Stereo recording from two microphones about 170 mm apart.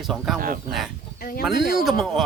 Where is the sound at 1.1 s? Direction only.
60° left (ahead or behind).